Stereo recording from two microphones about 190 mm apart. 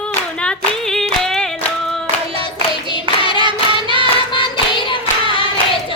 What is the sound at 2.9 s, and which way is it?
Singing, 25° left (ahead or behind).